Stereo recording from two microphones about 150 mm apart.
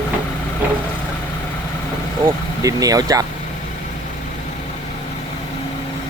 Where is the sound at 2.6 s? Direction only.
25° right (ahead or behind).